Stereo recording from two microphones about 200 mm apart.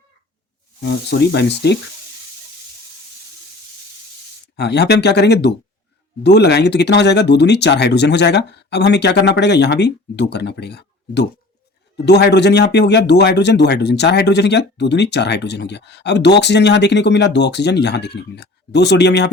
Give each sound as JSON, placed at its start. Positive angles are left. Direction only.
{"t": 0.8, "sound": "speech", "side_deg": 55}
{"t": 4.5, "sound": "speech", "side_deg": 55}